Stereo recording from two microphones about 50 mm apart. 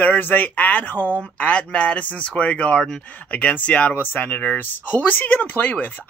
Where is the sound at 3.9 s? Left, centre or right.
Left.